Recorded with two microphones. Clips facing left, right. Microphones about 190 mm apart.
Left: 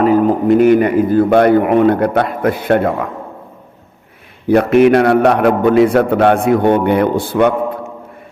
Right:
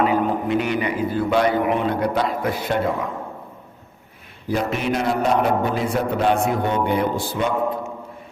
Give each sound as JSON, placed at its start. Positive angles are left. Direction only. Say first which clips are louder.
{"t": 0.0, "sound": "a man's voice", "louder": "left 8 dB", "side_deg": 45}
{"t": 4.4, "sound": "a man's voice", "louder": "left 13 dB", "side_deg": 65}